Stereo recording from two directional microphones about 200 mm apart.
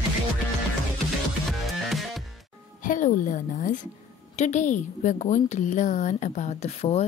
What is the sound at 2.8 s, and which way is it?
A woman's voice, 40° left (ahead or behind).